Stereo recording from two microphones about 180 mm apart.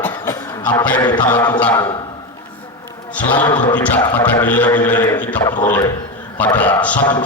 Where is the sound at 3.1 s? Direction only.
10° left (ahead or behind).